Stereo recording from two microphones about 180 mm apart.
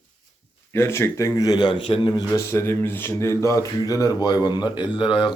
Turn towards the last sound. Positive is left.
turn(degrees=25)  # may be behind; listen again after turning